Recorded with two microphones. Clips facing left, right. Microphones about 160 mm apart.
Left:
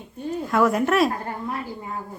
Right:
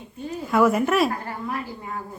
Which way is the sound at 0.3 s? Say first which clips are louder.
Right 1 dB; centre (ahead or behind).